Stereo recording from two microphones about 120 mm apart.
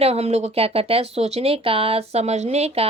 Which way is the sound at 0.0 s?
60° right (ahead or behind).